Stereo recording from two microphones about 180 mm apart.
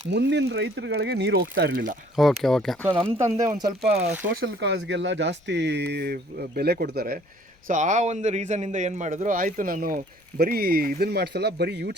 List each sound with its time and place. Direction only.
0.1 s speech: 75° right (ahead or behind)
2.1 s speech: centre (ahead or behind)
2.8 s speech: 30° right (ahead or behind)
4.4 s speech: 75° right (ahead or behind); by 7.2 s 55° right (ahead or behind)
7.7 s speech: 45° right (ahead or behind); by 11.9 s 65° right (ahead or behind)